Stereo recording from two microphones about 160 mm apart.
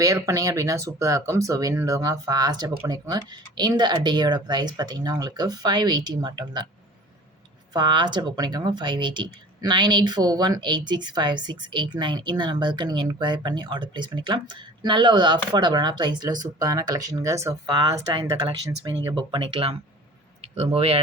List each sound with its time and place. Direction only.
0.0 s speech: 20° right (ahead or behind)
7.7 s speech: 30° right (ahead or behind)